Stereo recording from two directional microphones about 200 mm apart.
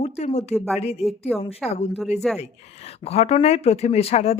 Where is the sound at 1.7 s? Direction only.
30° left (ahead or behind).